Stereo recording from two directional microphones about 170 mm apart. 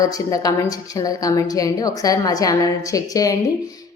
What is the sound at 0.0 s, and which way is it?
A woman's voice, 20° left (ahead or behind).